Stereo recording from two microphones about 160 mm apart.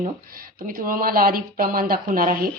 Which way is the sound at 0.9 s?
65° right (ahead or behind).